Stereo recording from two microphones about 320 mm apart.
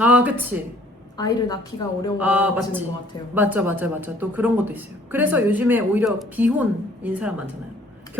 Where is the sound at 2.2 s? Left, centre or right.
Centre.